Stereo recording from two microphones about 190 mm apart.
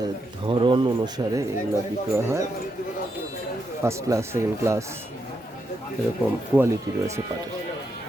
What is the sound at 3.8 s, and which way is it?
Speech, 15° right (ahead or behind).